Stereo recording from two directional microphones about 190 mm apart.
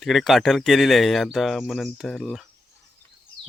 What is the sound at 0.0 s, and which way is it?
Speech, centre (ahead or behind).